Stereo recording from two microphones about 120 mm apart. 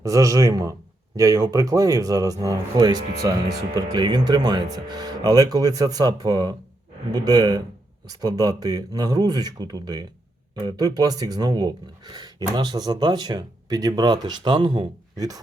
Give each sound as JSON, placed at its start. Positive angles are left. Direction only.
{"t": 0.0, "sound": "speech", "side_deg": -30}